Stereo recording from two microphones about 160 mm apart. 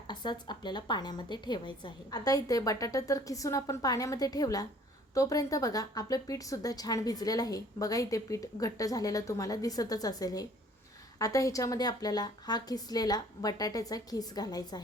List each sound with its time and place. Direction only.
0.1 s a woman's voice: 30° left (ahead or behind)